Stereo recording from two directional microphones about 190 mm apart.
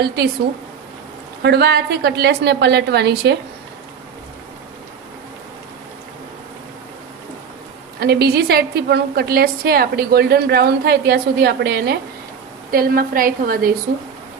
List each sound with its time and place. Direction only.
1.4 s a woman's voice: 60° right (ahead or behind)
7.9 s a woman's voice: 60° right (ahead or behind)